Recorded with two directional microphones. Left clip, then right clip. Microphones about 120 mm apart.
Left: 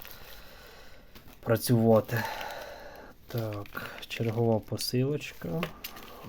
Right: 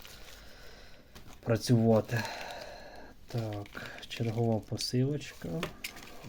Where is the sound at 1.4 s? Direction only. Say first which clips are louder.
Left 3 dB; 35° left (ahead or behind).